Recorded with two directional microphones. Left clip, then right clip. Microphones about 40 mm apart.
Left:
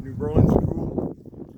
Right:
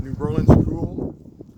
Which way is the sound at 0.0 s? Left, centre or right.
Left.